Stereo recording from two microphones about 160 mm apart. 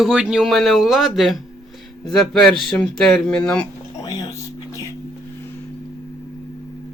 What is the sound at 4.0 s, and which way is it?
Music, 25° left (ahead or behind).